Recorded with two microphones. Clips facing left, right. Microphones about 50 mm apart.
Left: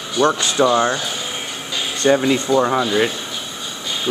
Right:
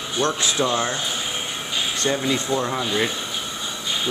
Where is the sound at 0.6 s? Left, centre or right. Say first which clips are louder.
Left 8 dB; left.